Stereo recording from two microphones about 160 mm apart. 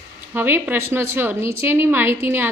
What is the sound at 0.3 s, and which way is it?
A woman's voice, 10° right (ahead or behind).